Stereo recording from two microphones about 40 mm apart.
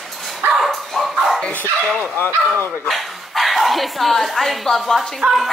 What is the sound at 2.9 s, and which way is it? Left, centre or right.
Speech, centre.